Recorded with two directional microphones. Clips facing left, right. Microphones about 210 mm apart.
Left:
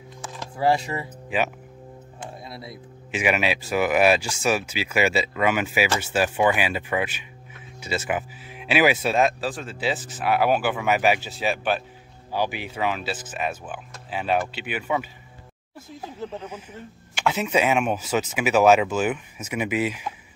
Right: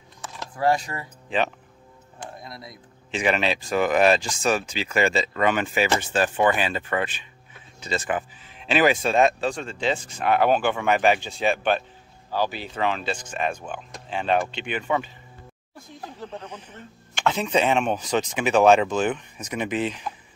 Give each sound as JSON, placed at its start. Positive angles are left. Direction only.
{"t": 0.7, "sound": "speech", "side_deg": 25}
{"t": 1.3, "sound": "speech", "side_deg": 10}
{"t": 2.4, "sound": "speech", "side_deg": 30}
{"t": 2.7, "sound": "speech", "side_deg": 10}